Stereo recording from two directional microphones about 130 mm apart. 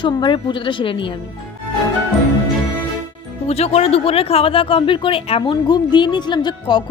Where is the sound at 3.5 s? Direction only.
55° left (ahead or behind).